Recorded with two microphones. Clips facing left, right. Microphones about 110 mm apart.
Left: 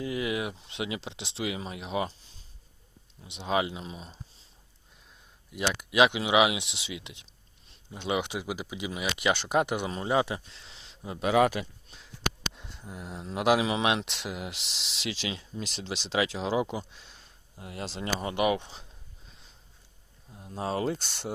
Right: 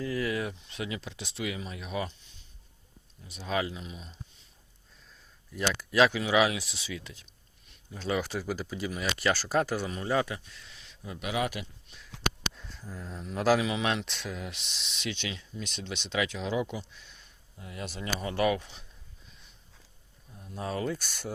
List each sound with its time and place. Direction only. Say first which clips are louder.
0.0 s a sound: even; 20° left (ahead or behind)
0.6 s speech: left 2 dB; 25° left (ahead or behind)
3.3 s speech: left 3 dB; 20° left (ahead or behind)
5.5 s speech: even; 15° left (ahead or behind)
11.3 s speech: left 8 dB; 55° left (ahead or behind)
12.5 s speech: left 1 dB; 20° left (ahead or behind)
20.3 s speech: left 3 dB; 25° left (ahead or behind)